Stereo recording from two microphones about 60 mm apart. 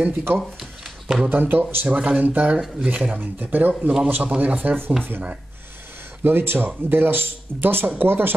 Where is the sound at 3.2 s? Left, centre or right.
Right.